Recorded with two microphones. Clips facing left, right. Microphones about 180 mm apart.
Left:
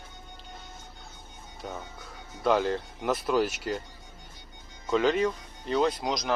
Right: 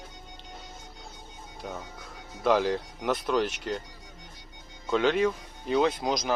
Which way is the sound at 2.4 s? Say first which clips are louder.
Right 1 dB; centre (ahead or behind).